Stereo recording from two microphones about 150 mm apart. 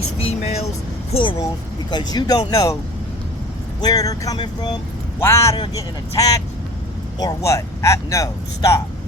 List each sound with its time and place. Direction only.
0.2 s speech: 40° left (ahead or behind); by 2.7 s 20° left (ahead or behind)
3.8 s speech: 25° left (ahead or behind)